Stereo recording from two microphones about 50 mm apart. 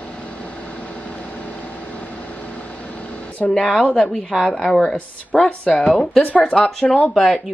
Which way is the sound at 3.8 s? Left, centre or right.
Left.